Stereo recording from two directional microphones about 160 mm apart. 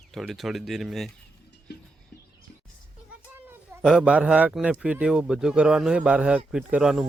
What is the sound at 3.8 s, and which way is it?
A man's voice, 5° right (ahead or behind).